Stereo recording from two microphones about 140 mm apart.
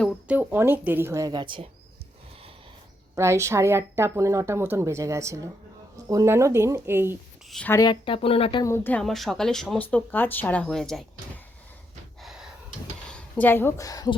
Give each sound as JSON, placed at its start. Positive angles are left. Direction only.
{"t": 0.3, "sound": "a woman's voice", "side_deg": -15}
{"t": 3.2, "sound": "a woman's voice", "side_deg": -20}
{"t": 7.7, "sound": "speech", "side_deg": 25}
{"t": 8.0, "sound": "speech", "side_deg": 40}
{"t": 8.6, "sound": "speech", "side_deg": 15}
{"t": 9.0, "sound": "speech", "side_deg": 0}
{"t": 12.2, "sound": "gasp", "side_deg": -5}
{"t": 13.1, "sound": "a woman's voice", "side_deg": 10}